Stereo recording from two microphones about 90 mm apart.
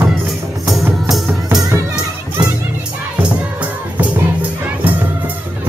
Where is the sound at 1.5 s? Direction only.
45° right (ahead or behind).